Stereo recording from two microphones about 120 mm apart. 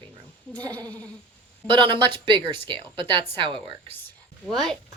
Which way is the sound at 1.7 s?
40° right (ahead or behind).